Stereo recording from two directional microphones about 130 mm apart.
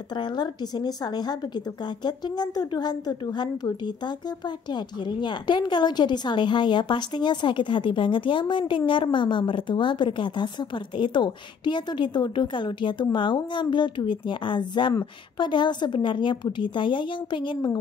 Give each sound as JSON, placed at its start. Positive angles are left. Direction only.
{"t": 0.1, "sound": "a woman's voice", "side_deg": 35}